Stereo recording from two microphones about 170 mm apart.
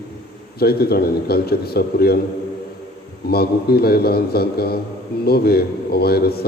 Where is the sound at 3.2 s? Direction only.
65° left (ahead or behind).